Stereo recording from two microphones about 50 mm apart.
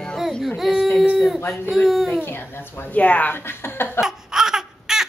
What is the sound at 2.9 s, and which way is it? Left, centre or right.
Speech, left.